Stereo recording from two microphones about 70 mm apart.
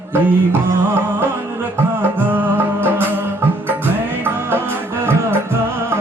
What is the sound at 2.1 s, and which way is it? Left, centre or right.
Music, right.